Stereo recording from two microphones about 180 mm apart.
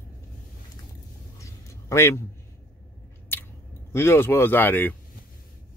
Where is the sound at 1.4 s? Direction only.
15° left (ahead or behind).